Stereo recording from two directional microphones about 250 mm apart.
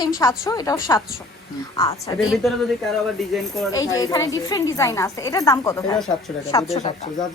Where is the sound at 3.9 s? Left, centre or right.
Centre.